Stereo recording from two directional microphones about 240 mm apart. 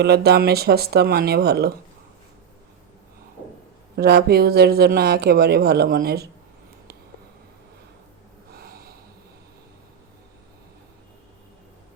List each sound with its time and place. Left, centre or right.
0.0 s speech: right
3.9 s speech: right
8.5 s snort: right